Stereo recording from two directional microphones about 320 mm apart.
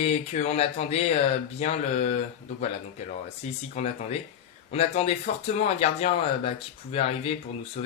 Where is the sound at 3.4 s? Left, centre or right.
Left.